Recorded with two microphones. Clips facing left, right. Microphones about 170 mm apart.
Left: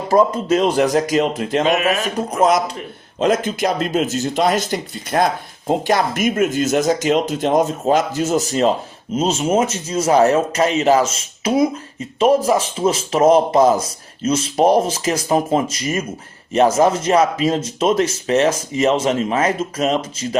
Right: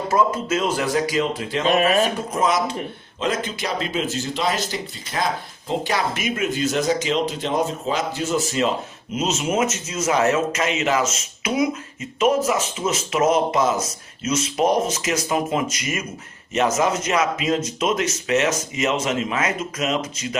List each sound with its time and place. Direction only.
0.1 s speech: 35° left (ahead or behind)
1.6 s speech: 40° right (ahead or behind)
2.1 s speech: 40° left (ahead or behind)